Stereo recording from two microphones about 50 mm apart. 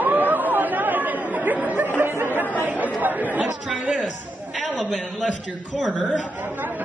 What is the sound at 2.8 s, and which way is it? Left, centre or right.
Speech, right.